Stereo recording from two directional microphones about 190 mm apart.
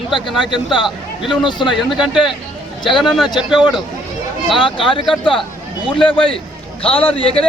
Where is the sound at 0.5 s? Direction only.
25° left (ahead or behind).